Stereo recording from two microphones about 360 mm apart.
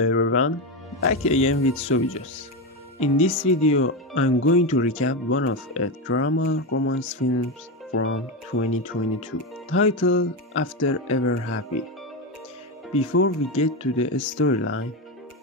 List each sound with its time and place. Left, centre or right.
0.0 s music: left
1.1 s speech: centre
1.5 s speech: left
3.0 s speech: centre
3.7 s speech: left
9.7 s speech: left
13.1 s speech: left
13.6 s speech: centre
14.1 s speech: left